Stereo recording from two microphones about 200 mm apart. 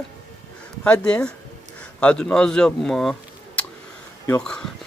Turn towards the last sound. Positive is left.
turn(degrees=5)  # may be behind; listen again after turning